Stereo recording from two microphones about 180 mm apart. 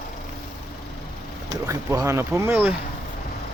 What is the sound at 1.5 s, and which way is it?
Speech, 20° right (ahead or behind).